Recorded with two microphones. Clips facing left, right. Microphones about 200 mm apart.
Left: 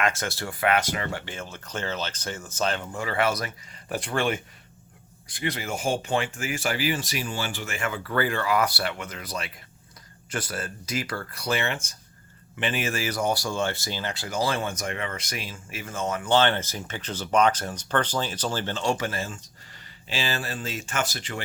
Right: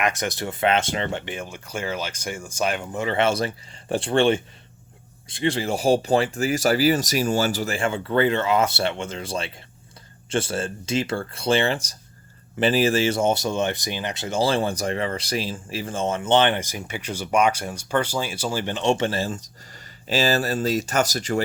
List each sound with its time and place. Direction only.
0.0 s speech: 20° right (ahead or behind); by 21.4 s 40° right (ahead or behind)